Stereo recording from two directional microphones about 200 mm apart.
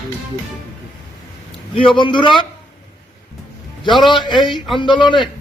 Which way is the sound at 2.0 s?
25° left (ahead or behind).